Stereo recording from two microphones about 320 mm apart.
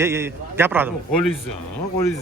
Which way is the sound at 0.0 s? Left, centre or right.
Centre.